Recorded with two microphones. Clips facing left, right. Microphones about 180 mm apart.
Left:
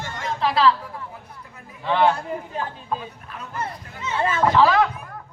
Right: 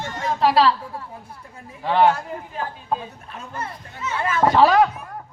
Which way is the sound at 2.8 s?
30° right (ahead or behind).